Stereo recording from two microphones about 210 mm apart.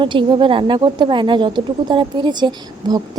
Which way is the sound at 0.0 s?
25° right (ahead or behind).